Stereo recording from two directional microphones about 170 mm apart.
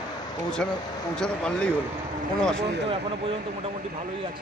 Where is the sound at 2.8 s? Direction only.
35° right (ahead or behind).